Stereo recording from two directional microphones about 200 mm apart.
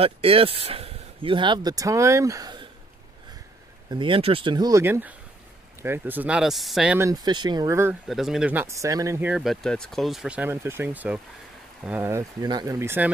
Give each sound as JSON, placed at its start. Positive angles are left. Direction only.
{"t": 0.0, "sound": "speech", "side_deg": -30}
{"t": 3.9, "sound": "speech", "side_deg": -25}
{"t": 7.0, "sound": "speech", "side_deg": -20}
{"t": 8.1, "sound": "speech", "side_deg": 0}